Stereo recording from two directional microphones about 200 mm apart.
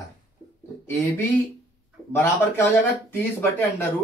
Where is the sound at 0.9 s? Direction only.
10° left (ahead or behind).